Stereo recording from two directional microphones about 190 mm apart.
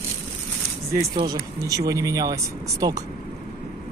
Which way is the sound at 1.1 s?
20° right (ahead or behind).